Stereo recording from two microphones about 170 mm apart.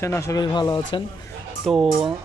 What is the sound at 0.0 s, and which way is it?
Speech, 15° left (ahead or behind).